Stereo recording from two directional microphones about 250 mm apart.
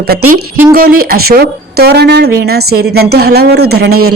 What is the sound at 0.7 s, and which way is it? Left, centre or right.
Speech, right.